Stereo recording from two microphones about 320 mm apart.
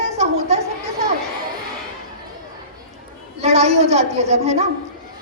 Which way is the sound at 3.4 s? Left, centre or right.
Centre.